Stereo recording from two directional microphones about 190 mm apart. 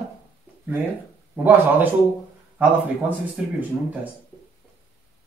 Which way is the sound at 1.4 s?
10° right (ahead or behind).